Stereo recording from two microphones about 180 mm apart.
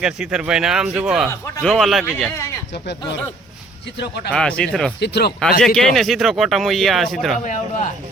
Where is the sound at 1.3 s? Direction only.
15° left (ahead or behind).